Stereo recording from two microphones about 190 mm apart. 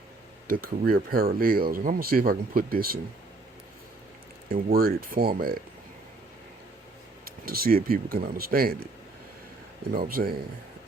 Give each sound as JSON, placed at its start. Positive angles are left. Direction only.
{"t": 0.6, "sound": "speech", "side_deg": -50}
{"t": 4.4, "sound": "speech", "side_deg": -50}
{"t": 7.3, "sound": "speech", "side_deg": -50}
{"t": 9.9, "sound": "speech", "side_deg": -50}